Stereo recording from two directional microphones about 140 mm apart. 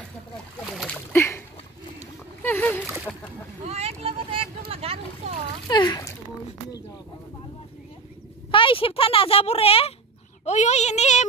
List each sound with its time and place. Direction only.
0.8 s splash: 15° left (ahead or behind)
2.4 s a sound: 15° left (ahead or behind)
3.1 s speech: 15° left (ahead or behind)
3.6 s vehicle: 50° right (ahead or behind)
5.7 s splash: 30° left (ahead or behind)
8.5 s speech: 40° left (ahead or behind)
10.4 s child singing: 55° left (ahead or behind)